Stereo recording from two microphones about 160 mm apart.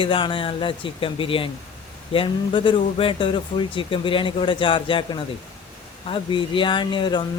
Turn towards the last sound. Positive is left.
turn(degrees=30)  # may be behind; listen again after turning